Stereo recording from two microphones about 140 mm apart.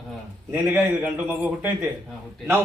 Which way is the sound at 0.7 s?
10° right (ahead or behind).